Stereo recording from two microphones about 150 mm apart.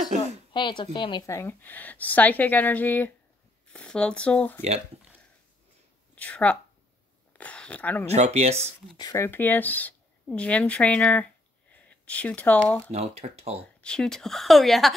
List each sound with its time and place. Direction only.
0.0 s a sound: 50° right (ahead or behind)
0.5 s speech: 30° left (ahead or behind); by 4.6 s 10° left (ahead or behind)
6.1 s speech: 10° left (ahead or behind)
8.1 s speech: 45° right (ahead or behind)
8.9 s speech: 20° left (ahead or behind)
12.9 s speech: 45° right (ahead or behind)
13.7 s speech: 5° left (ahead or behind)